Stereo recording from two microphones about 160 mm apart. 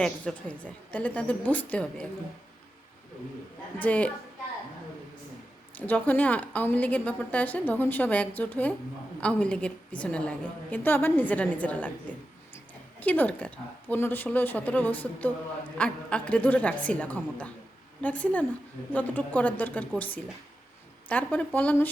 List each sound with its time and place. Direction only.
0.0 s a woman's voice: 5° left (ahead or behind)
3.8 s a woman's voice: 10° left (ahead or behind)
5.7 s a woman's voice: 10° left (ahead or behind)
13.0 s a woman's voice: 10° left (ahead or behind)